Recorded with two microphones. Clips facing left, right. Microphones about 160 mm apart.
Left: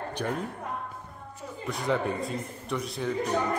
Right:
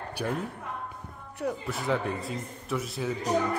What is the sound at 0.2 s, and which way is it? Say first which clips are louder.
Speech: even; 5° right (ahead or behind).